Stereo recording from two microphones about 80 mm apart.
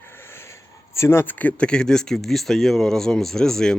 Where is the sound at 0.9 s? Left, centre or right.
Left; by 3.7 s centre.